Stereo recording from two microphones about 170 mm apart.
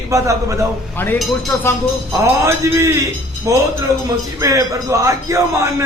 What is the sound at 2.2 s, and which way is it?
A man's voice, 15° right (ahead or behind).